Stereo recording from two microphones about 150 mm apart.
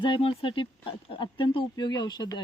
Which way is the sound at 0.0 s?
35° left (ahead or behind).